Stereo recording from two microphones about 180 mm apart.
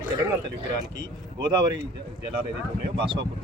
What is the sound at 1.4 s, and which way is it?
Speech, 25° right (ahead or behind).